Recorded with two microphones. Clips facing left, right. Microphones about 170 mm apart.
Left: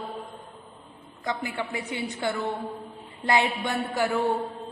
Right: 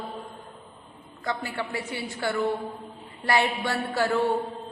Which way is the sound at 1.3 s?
20° left (ahead or behind).